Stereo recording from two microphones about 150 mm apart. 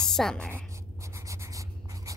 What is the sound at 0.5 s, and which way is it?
Writing, 20° right (ahead or behind).